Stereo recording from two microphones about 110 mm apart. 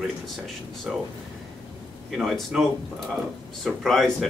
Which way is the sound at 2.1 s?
Centre (ahead or behind).